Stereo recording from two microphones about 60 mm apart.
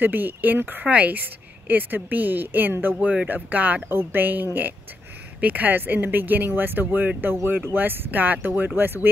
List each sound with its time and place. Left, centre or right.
0.0 s speech: right